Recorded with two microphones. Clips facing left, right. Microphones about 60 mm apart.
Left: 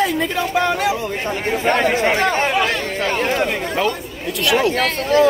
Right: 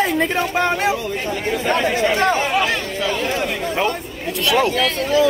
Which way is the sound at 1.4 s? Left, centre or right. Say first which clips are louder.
Left 2 dB; left.